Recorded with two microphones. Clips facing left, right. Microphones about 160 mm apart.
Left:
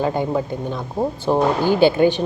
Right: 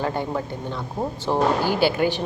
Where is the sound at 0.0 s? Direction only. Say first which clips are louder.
Left 5 dB; 15° left (ahead or behind).